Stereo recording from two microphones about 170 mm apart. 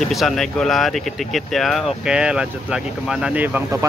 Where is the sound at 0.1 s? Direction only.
Centre (ahead or behind).